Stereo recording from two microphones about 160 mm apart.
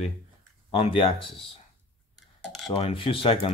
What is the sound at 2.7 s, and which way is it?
Speech, 35° left (ahead or behind).